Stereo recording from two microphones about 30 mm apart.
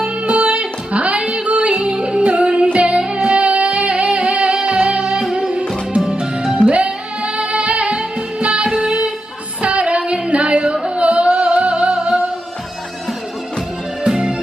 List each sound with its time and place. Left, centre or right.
0.0 s music: right
6.6 s music: left
7.2 s music: right
8.7 s music: right
9.6 s music: right
9.8 s singing: right
10.6 s music: right
14.1 s music: right